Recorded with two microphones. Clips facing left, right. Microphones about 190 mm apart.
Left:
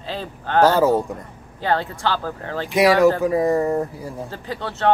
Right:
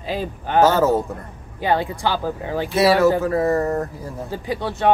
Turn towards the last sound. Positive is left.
turn(degrees=-15)  # may be behind; listen again after turning